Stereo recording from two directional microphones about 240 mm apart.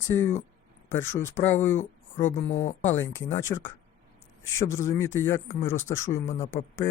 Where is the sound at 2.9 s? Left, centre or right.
Left.